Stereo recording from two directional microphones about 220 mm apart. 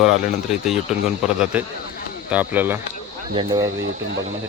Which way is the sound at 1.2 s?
5° right (ahead or behind).